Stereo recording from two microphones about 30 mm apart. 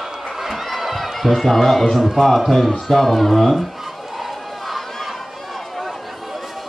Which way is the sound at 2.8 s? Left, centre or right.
Centre.